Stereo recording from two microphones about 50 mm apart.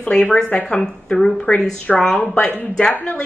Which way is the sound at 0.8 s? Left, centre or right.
Centre.